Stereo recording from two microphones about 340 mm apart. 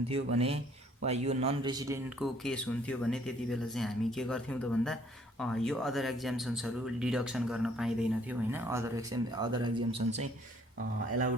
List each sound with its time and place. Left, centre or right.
0.1 s speech: centre